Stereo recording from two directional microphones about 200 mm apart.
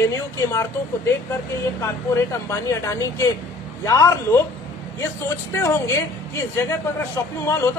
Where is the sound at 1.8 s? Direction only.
15° left (ahead or behind).